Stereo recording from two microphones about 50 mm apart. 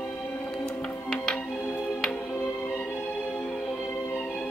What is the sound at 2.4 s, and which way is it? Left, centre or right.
Music, left.